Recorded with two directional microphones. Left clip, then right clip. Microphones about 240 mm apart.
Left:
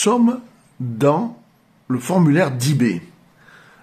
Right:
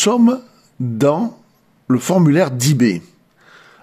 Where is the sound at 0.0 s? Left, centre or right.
Right.